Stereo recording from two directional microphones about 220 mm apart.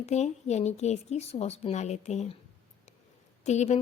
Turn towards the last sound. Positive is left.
turn(degrees=30)  # may be behind; listen again after turning